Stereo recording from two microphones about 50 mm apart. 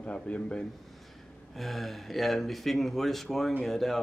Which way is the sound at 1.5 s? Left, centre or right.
Centre.